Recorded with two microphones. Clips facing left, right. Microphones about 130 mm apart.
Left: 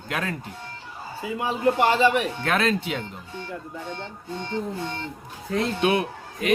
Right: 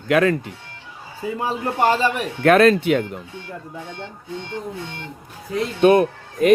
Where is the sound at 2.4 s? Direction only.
60° right (ahead or behind).